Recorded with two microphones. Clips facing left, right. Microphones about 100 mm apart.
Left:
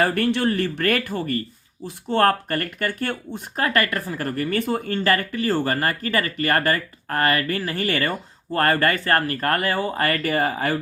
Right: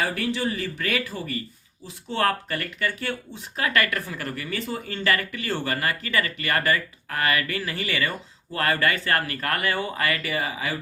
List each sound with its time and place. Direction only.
0.0 s speech: 55° left (ahead or behind)